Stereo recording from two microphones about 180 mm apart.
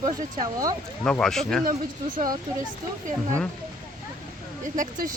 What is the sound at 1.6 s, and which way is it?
Speech, 50° right (ahead or behind).